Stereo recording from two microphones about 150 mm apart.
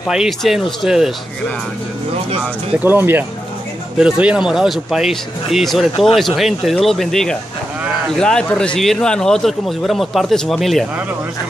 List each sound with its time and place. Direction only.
0.0 s a man's voice: centre (ahead or behind)
2.8 s a man's voice: 10° right (ahead or behind)